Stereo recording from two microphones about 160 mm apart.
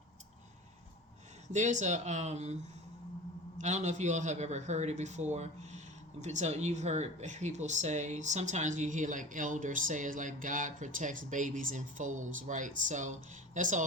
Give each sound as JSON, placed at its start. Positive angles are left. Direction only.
{"t": 1.5, "sound": "speech", "side_deg": -50}
{"t": 3.6, "sound": "speech", "side_deg": -45}